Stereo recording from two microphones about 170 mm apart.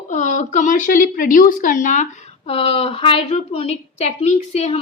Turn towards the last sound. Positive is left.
turn(degrees=40)  # may be behind; listen again after turning